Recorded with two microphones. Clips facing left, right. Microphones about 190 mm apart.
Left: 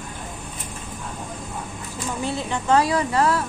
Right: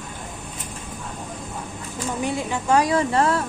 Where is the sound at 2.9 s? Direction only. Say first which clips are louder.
Right 1 dB; 25° right (ahead or behind).